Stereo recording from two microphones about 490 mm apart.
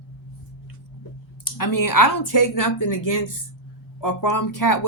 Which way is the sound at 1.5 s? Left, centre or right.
Left.